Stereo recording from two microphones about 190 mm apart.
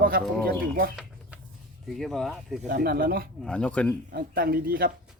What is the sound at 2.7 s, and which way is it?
Speech, 55° right (ahead or behind).